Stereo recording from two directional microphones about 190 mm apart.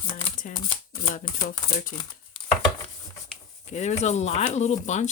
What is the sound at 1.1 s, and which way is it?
Speech, 45° left (ahead or behind).